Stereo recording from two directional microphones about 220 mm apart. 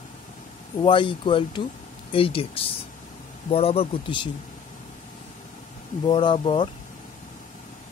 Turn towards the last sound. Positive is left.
turn(degrees=25)  # may be behind; listen again after turning